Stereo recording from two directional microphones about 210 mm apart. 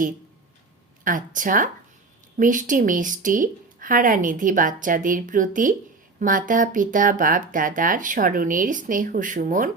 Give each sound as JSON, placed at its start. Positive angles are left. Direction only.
{"t": 1.0, "sound": "speech", "side_deg": -40}